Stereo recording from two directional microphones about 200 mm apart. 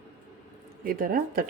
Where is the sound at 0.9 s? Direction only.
45° right (ahead or behind).